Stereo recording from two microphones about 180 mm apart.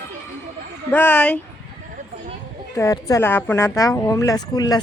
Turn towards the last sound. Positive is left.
turn(degrees=20)  # may be behind; listen again after turning